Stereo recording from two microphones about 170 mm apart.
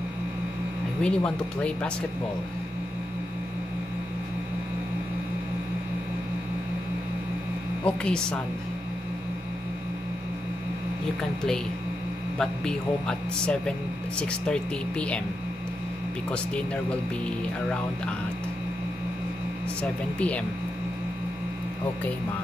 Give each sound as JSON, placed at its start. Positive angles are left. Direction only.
{"t": 1.0, "sound": "speech", "side_deg": 5}
{"t": 7.8, "sound": "speech", "side_deg": 5}
{"t": 12.4, "sound": "speech", "side_deg": 5}
{"t": 16.3, "sound": "speech", "side_deg": 5}
{"t": 19.8, "sound": "speech", "side_deg": 5}